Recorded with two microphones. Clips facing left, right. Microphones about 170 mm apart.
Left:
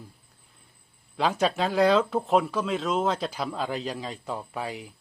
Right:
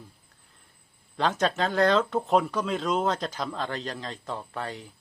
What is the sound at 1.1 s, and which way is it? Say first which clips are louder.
Speech: left 1 dB; 5° left (ahead or behind).